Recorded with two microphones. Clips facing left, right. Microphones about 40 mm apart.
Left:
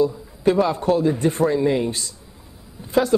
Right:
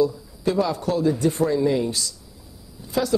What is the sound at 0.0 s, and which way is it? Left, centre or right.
A man's voice, left.